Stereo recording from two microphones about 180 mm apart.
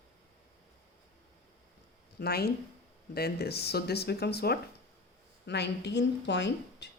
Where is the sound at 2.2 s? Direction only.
60° left (ahead or behind); by 6.9 s 75° left (ahead or behind).